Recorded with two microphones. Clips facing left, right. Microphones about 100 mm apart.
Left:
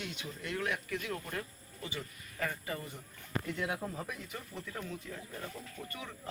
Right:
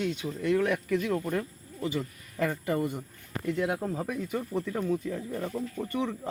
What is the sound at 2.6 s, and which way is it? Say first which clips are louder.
Speech: right 12 dB; 65° right (ahead or behind).